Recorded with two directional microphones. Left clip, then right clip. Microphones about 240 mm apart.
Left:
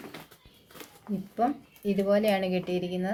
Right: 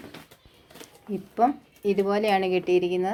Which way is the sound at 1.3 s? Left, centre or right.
Right.